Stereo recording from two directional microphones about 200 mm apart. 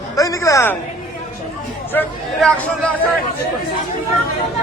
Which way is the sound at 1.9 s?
5° left (ahead or behind).